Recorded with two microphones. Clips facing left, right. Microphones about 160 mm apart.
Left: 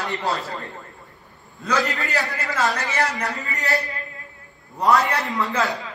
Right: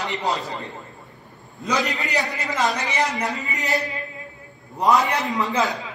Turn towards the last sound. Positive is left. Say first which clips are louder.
# right 1 dB
turn(degrees=-20)  # may be behind; listen again after turning